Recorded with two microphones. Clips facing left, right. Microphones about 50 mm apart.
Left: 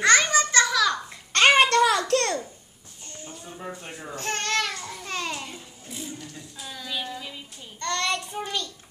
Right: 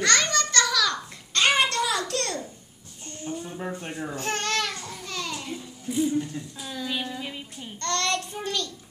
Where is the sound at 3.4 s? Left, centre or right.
Centre.